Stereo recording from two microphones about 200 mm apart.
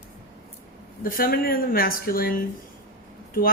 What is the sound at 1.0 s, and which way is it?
Speech, 45° left (ahead or behind).